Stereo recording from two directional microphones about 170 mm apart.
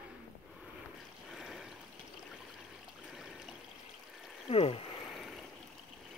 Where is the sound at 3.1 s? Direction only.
Centre (ahead or behind).